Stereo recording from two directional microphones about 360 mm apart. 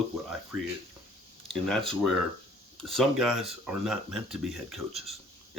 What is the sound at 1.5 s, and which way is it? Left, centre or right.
Speech, centre.